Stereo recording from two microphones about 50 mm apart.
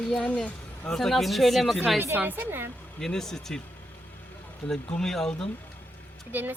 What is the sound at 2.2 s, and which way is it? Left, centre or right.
Speech, right.